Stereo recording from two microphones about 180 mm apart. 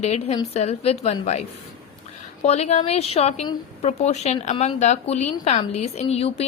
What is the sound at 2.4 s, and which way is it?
Speech, 35° left (ahead or behind).